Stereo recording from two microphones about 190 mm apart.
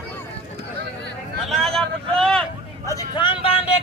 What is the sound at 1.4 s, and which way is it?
Vehicle, centre (ahead or behind).